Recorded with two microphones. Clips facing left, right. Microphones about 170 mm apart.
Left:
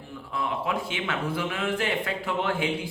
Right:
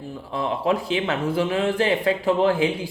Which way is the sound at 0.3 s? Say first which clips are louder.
Right 6 dB; 25° right (ahead or behind).